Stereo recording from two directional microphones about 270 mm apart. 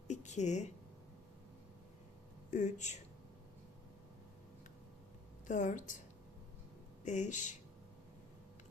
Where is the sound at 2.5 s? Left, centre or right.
Left.